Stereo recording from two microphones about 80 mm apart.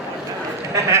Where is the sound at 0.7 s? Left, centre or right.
Right.